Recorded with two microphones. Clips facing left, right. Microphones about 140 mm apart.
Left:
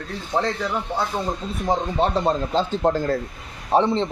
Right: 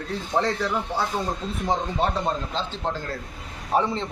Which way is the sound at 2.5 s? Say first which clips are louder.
Left 8 dB; 40° left (ahead or behind).